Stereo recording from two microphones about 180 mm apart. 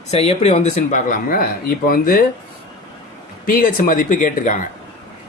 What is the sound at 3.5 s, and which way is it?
Speech, 50° left (ahead or behind).